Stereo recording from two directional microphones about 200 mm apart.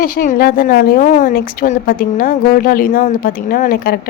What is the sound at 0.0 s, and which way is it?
A woman's voice, 45° left (ahead or behind).